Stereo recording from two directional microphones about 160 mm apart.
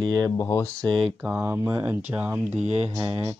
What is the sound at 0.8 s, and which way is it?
Speech, 5° left (ahead or behind).